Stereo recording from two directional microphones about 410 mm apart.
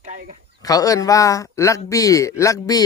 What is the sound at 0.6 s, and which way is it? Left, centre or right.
A man's voice, centre.